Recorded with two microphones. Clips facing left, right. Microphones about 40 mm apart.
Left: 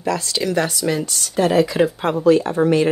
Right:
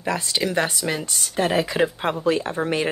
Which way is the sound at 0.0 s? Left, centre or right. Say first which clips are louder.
Left 2 dB; centre.